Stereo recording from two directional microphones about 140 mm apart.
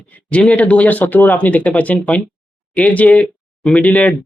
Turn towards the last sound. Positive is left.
turn(degrees=10)  # may be behind; listen again after turning